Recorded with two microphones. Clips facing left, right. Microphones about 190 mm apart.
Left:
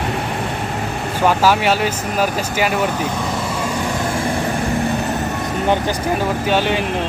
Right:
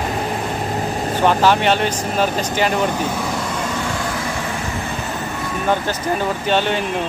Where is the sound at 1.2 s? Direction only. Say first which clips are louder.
Even; 5° left (ahead or behind).